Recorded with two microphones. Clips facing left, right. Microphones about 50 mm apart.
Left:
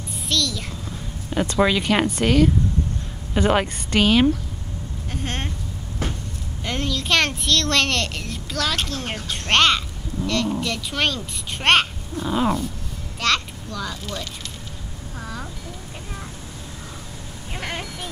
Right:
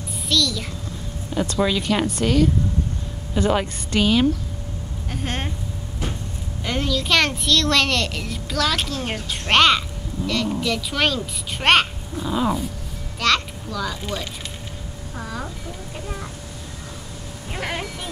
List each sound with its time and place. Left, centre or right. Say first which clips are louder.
0.3 s a sound: right 2 dB; centre
1.3 s speech: left 2 dB; left
2.2 s dog: left 1 dB; centre
3.3 s speech: left 1 dB; left
5.1 s speech: right 1 dB; centre
6.6 s a child's voice: right 2 dB; centre
12.3 s dog: left 1 dB; centre
13.2 s a sound: right 2 dB; centre
17.5 s vehicle: right 2 dB; centre